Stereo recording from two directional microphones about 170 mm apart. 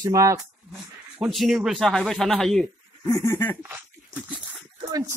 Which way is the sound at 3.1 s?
15° left (ahead or behind).